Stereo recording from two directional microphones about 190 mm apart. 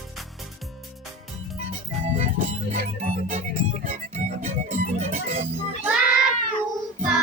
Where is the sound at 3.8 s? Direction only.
40° right (ahead or behind).